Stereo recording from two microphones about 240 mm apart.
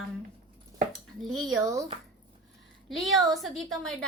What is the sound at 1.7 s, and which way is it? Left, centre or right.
Speech, right.